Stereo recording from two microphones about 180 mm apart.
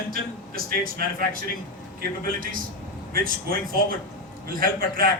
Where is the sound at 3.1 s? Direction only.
55° right (ahead or behind).